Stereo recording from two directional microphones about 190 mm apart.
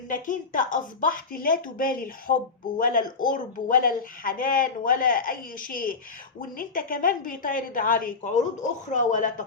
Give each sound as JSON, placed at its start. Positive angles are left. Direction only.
{"t": 0.1, "sound": "speech", "side_deg": 45}